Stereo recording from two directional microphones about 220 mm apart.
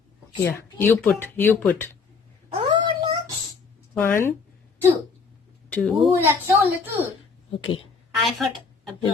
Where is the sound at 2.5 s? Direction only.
20° right (ahead or behind).